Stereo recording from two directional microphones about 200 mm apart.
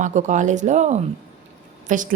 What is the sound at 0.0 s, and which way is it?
Speech, 35° right (ahead or behind).